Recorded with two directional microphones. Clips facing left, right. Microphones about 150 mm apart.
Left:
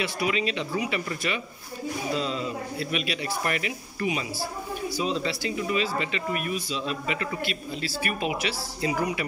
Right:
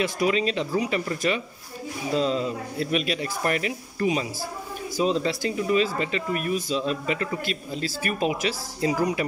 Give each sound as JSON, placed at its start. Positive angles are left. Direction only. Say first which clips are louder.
{"t": 0.0, "sound": "speech", "louder": "right 4 dB", "side_deg": -40}